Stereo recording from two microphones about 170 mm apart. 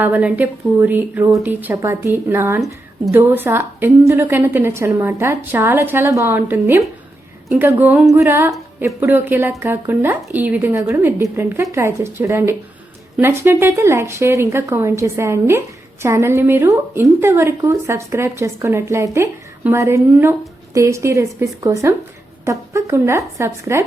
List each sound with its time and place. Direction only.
0.0 s speech: 10° right (ahead or behind)